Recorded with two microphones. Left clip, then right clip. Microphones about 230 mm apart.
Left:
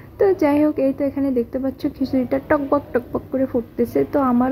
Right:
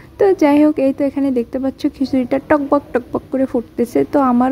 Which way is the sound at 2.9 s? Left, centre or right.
Right.